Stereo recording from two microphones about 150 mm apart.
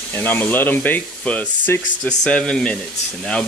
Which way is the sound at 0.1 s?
10° left (ahead or behind).